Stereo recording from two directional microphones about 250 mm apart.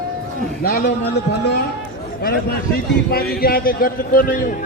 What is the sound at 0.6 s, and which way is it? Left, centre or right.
Speech, left.